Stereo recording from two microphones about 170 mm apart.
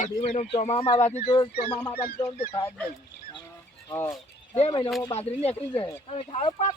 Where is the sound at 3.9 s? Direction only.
15° left (ahead or behind).